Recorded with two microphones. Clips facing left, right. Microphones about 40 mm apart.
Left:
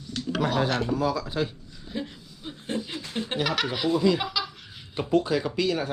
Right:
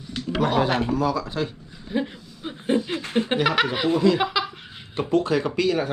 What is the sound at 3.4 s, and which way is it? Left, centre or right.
Speech, right.